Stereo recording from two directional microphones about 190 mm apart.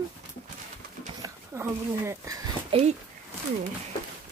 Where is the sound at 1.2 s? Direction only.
15° right (ahead or behind).